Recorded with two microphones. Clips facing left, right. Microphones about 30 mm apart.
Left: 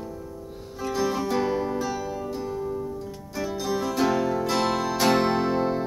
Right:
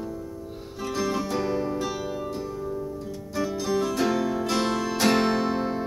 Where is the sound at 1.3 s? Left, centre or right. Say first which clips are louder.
Left 2 dB; centre.